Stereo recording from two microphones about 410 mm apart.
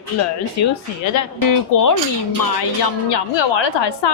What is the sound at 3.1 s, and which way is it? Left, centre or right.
A woman's voice, left.